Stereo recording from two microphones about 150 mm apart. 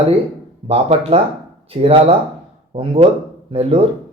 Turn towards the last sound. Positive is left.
turn(degrees=-40)  # may be behind; listen again after turning